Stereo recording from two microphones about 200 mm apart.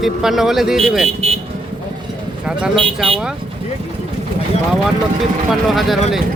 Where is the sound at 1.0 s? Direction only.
30° right (ahead or behind).